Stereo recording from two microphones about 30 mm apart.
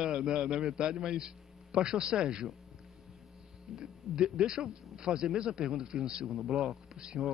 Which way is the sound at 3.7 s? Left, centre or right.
Right.